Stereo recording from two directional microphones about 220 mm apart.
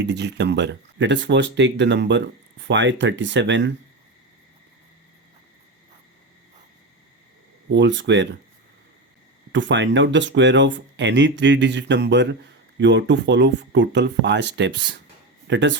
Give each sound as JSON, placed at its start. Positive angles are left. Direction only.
{"t": 0.0, "sound": "speech", "side_deg": -50}
{"t": 7.7, "sound": "speech", "side_deg": -55}
{"t": 9.5, "sound": "speech", "side_deg": -55}